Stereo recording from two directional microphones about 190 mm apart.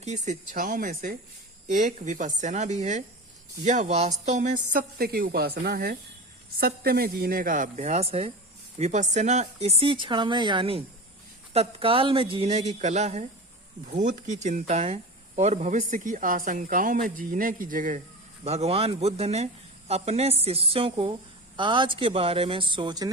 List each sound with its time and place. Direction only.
0.0 s speech: 40° right (ahead or behind)
18.4 s speech: 35° right (ahead or behind)